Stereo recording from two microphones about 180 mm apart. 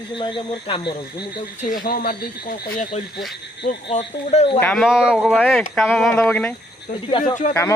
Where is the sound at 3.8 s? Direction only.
40° left (ahead or behind).